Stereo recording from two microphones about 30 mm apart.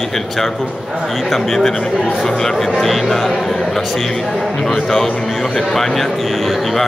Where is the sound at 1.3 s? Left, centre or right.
Centre.